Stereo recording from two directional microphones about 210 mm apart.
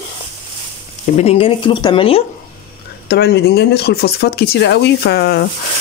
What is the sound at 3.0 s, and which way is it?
Speech, 50° left (ahead or behind).